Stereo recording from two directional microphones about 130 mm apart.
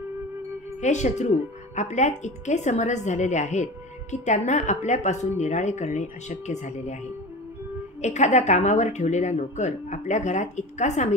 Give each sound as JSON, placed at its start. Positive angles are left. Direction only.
{"t": 0.7, "sound": "a woman's voice", "side_deg": 65}
{"t": 8.0, "sound": "a woman's voice", "side_deg": 65}